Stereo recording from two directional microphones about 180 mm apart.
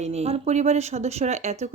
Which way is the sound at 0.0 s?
35° right (ahead or behind).